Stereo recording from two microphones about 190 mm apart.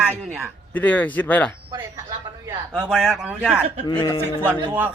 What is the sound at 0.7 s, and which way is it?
Speech, 10° left (ahead or behind).